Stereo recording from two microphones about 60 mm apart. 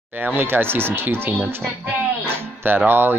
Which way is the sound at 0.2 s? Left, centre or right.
Right.